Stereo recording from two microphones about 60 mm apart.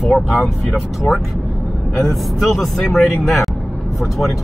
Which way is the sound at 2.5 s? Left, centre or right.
Centre.